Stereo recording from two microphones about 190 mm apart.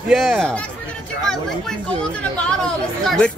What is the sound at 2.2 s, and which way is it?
Speech, 5° left (ahead or behind).